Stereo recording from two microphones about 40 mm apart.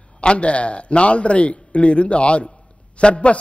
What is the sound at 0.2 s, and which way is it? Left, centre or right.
A man's voice, left.